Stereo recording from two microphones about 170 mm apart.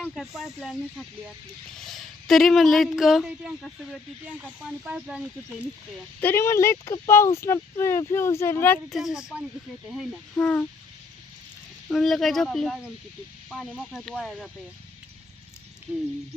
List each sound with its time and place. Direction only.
0.0 s speech: centre (ahead or behind)
6.1 s speech: 15° left (ahead or behind)
8.9 s speech: centre (ahead or behind)
10.3 s speech: 10° left (ahead or behind)
11.9 s speech: centre (ahead or behind)
15.9 s speech: 15° right (ahead or behind)